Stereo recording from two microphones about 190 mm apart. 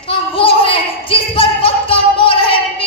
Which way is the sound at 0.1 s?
30° left (ahead or behind).